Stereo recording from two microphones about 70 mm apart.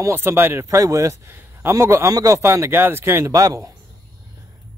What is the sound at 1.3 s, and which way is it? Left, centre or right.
A man's voice, right.